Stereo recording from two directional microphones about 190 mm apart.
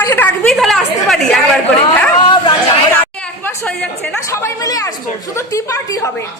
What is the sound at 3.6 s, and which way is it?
A woman's voice, 10° left (ahead or behind).